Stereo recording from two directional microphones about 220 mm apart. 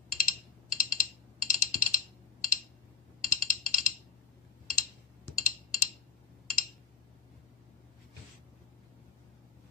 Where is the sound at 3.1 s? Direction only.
40° left (ahead or behind).